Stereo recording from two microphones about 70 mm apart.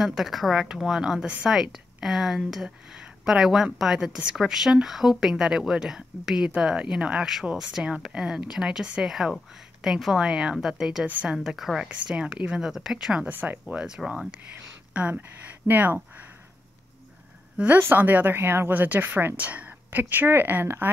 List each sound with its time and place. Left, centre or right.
0.0 s a woman's voice: centre
11.9 s a woman's voice: centre
13.3 s a woman's voice: right
13.7 s a woman's voice: centre; by 16.0 s right
17.7 s a woman's voice: right